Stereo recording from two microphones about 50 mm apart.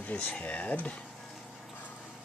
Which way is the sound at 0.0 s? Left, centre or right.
Left.